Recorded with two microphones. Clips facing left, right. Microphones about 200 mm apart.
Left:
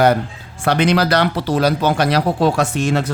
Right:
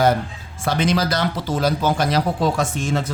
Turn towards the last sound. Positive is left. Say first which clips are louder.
# left 4 dB
turn(degrees=70)  # may be behind; listen again after turning